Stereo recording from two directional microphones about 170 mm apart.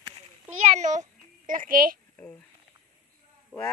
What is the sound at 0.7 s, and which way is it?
A child's voice, 45° right (ahead or behind).